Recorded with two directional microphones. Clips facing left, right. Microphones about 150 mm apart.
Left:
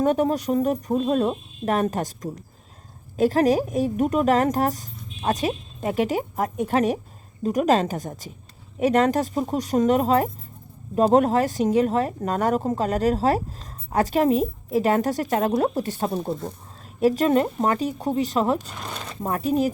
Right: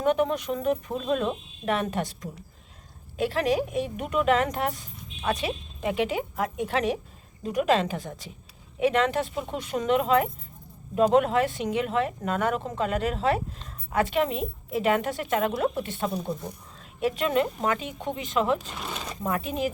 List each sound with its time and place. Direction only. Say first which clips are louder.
0.0 s a woman's voice: left 3 dB; 40° left (ahead or behind)
18.7 s speech: left 1 dB; 5° right (ahead or behind)
19.2 s speech: left 6 dB; 40° left (ahead or behind)